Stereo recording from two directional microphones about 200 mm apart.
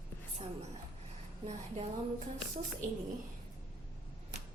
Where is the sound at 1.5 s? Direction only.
35° right (ahead or behind).